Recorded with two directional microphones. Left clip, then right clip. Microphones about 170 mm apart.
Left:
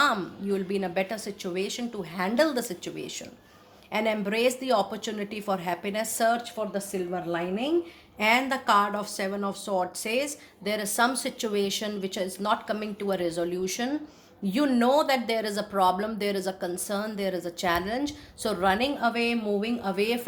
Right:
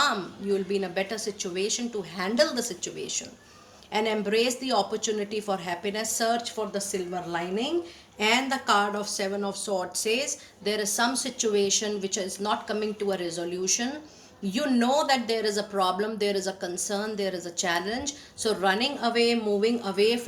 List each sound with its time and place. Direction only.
0.0 s speech: 45° left (ahead or behind)